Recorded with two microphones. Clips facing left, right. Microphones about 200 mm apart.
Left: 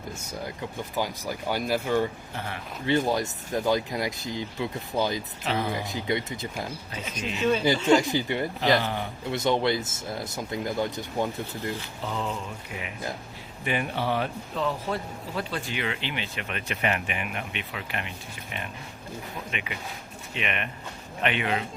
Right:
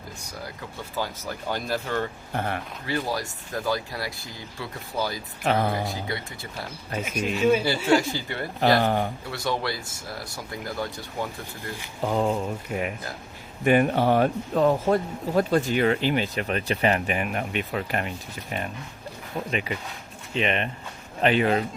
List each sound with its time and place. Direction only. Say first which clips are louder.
0.2 s speech: left 2 dB; 20° left (ahead or behind)
2.3 s speech: right 7 dB; 50° right (ahead or behind)
2.8 s speech: left 5 dB; 20° left (ahead or behind)
5.5 s speech: right 5 dB; 50° right (ahead or behind)
5.8 s speech: left 2 dB; 20° left (ahead or behind)
7.8 s speech: even; 10° right (ahead or behind)
8.0 s speech: left 4 dB; 15° left (ahead or behind)
8.8 s speech: right 7 dB; 50° right (ahead or behind)
9.3 s speech: left 7 dB; 20° left (ahead or behind)
12.0 s speech: right 8 dB; 45° right (ahead or behind)
19.5 s speech: right 6 dB; 35° right (ahead or behind)